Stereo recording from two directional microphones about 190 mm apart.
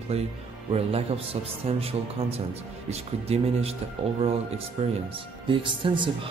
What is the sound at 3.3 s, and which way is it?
Speech, 35° right (ahead or behind).